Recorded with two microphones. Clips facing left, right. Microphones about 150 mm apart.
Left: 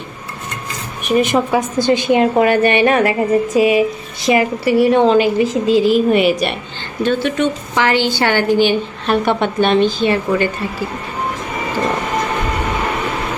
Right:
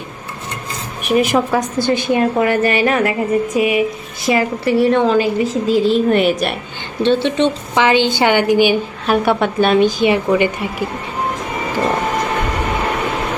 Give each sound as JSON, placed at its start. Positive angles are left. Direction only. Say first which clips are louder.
{"t": 1.0, "sound": "a woman's voice", "louder": "even", "side_deg": -5}
{"t": 1.8, "sound": "a woman's voice", "louder": "left 3 dB", "side_deg": 15}
{"t": 4.6, "sound": "a woman's voice", "louder": "even", "side_deg": 5}
{"t": 5.0, "sound": "a woman's voice", "louder": "left 2 dB", "side_deg": 25}
{"t": 6.1, "sound": "a woman's voice", "louder": "left 1 dB", "side_deg": 0}
{"t": 7.0, "sound": "a woman's voice", "louder": "right 2 dB", "side_deg": -25}